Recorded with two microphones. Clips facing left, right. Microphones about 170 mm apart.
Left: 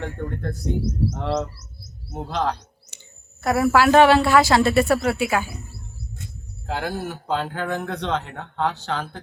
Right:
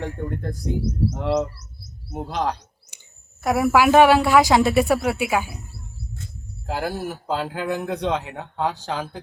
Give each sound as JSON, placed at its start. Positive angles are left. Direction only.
{"t": 0.0, "sound": "speech", "side_deg": -15}
{"t": 1.5, "sound": "bird", "side_deg": -60}
{"t": 2.1, "sound": "speech", "side_deg": -15}
{"t": 6.7, "sound": "speech", "side_deg": -5}